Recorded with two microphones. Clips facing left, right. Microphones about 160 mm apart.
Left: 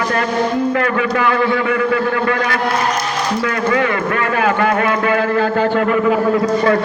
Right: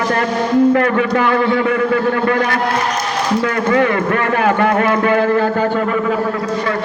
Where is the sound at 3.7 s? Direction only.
40° right (ahead or behind).